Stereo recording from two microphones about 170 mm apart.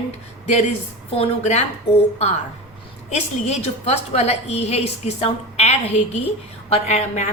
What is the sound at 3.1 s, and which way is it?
A woman's voice, 40° left (ahead or behind).